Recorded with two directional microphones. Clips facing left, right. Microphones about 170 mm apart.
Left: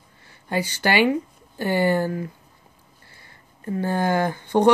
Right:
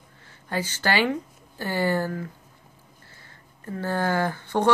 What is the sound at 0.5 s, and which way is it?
Speech, 15° left (ahead or behind).